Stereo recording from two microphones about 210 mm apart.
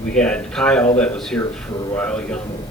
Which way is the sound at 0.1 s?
5° left (ahead or behind).